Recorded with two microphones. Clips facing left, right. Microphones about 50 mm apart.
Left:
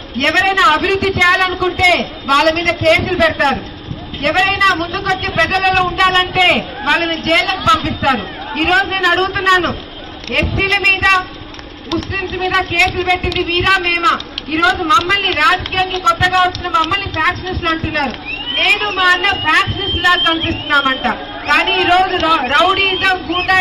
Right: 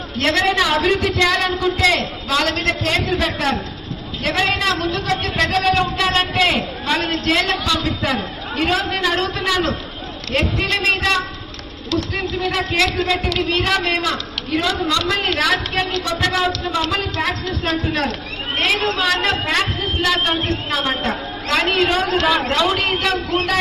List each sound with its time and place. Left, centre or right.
0.2 s a woman's voice: left